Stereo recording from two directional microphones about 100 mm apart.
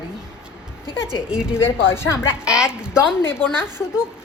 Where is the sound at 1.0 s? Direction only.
5° right (ahead or behind).